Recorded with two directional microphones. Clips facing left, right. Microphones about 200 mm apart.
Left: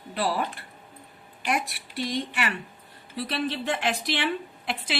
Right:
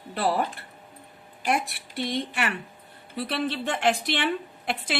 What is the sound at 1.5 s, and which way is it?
A woman's voice, 55° right (ahead or behind).